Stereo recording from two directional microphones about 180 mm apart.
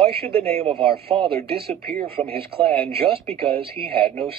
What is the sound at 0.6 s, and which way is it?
A man's voice, 30° right (ahead or behind).